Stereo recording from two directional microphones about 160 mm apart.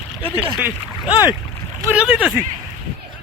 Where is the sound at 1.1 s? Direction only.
30° left (ahead or behind).